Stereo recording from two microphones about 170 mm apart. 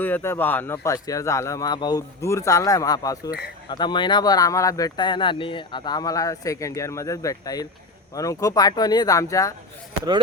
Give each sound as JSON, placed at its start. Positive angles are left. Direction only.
{"t": 0.0, "sound": "speech", "side_deg": 15}